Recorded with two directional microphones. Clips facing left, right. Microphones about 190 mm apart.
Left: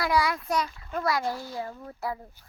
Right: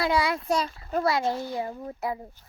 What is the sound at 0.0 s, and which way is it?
A child's voice, 25° right (ahead or behind).